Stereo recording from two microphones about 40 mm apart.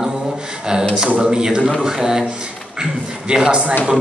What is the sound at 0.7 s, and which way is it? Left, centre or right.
A man's voice, centre.